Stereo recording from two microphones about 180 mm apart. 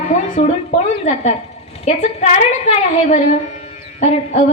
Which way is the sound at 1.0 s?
40° left (ahead or behind).